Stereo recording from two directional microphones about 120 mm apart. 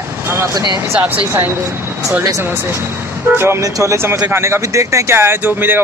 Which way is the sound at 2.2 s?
25° right (ahead or behind).